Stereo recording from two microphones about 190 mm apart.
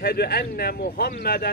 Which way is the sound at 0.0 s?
55° left (ahead or behind).